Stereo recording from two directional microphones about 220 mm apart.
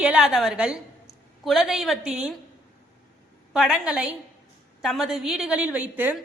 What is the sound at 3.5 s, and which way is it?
A woman's voice, 5° right (ahead or behind).